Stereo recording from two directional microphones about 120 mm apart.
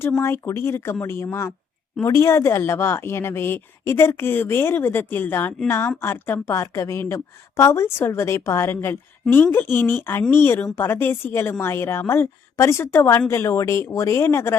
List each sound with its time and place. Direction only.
0.2 s a woman's voice: 20° left (ahead or behind)